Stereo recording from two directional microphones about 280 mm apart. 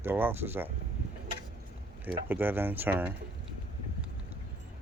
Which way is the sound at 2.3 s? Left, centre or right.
Centre.